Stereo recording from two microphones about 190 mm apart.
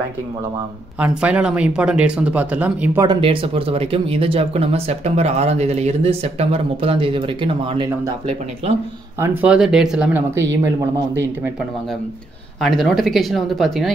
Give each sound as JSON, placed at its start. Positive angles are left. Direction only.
{"t": 0.9, "sound": "speech", "side_deg": -5}
{"t": 3.1, "sound": "speech", "side_deg": -30}
{"t": 9.2, "sound": "speech", "side_deg": -10}
{"t": 12.5, "sound": "speech", "side_deg": 0}